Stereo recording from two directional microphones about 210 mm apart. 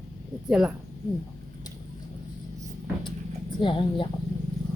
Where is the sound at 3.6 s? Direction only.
25° left (ahead or behind).